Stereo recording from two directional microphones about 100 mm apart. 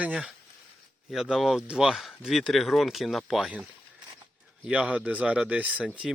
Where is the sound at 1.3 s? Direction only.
5° right (ahead or behind).